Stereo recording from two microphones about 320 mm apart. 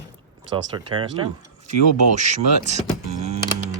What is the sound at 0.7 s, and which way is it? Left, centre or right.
Speech, centre.